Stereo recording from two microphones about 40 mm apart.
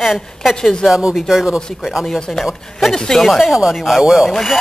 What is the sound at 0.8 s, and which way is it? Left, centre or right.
Speech, centre.